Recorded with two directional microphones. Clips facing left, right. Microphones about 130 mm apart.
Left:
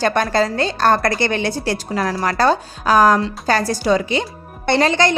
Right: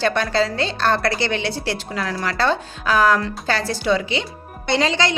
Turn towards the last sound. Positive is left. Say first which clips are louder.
# left 4 dB
turn(degrees=50)  # may be behind; listen again after turning